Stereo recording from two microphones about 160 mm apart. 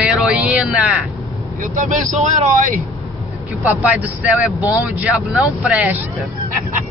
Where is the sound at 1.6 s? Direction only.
55° right (ahead or behind).